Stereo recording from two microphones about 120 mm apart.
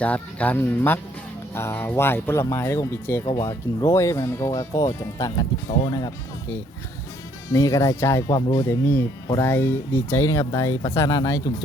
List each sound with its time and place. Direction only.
0.0 s speech: 10° left (ahead or behind); by 6.1 s 35° left (ahead or behind)
7.5 s speech: 25° left (ahead or behind)
8.4 s speech: 40° left (ahead or behind)
8.6 s speech: 20° left (ahead or behind)